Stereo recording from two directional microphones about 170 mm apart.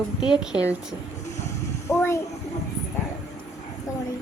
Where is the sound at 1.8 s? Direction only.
15° left (ahead or behind).